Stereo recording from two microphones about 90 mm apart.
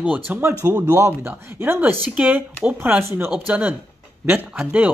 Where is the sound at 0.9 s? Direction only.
30° right (ahead or behind).